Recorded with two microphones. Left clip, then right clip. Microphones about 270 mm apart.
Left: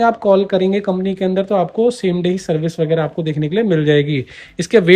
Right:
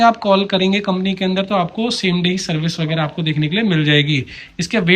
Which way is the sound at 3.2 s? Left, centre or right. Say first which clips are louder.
Left 2 dB; centre.